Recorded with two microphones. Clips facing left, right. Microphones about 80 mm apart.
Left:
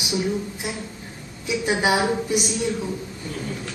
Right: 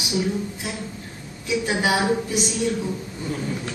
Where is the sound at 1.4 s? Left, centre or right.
Centre.